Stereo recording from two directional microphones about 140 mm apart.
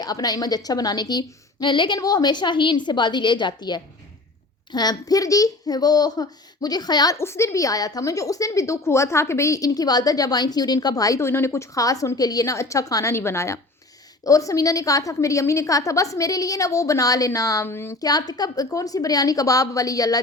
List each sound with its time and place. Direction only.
0.0 s a woman's voice: 25° left (ahead or behind)